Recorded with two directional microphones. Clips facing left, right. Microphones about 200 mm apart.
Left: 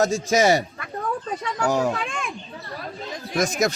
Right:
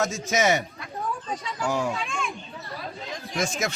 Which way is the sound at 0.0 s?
35° left (ahead or behind).